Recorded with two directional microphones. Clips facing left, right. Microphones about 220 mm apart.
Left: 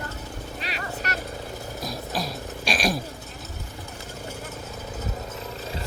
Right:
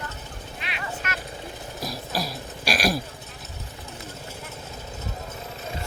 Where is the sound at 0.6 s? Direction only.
35° left (ahead or behind).